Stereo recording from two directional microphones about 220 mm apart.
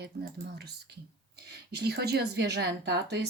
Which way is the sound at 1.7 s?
45° right (ahead or behind).